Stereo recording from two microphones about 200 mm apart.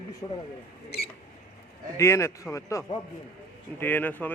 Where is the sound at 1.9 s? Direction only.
15° left (ahead or behind).